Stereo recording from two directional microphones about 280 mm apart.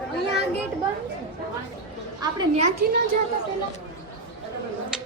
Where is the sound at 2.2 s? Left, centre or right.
Centre.